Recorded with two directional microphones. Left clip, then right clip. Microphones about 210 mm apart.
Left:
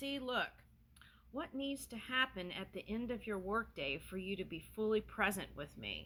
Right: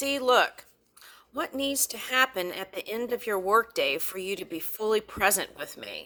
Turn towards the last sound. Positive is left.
turn(degrees=-35)  # may be behind; listen again after turning